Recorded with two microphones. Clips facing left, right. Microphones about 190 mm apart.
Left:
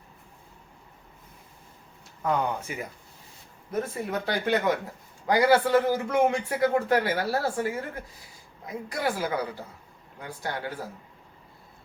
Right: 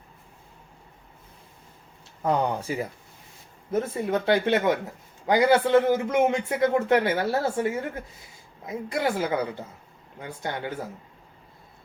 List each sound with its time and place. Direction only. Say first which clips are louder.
2.2 s a man's voice: right 3 dB; 30° right (ahead or behind)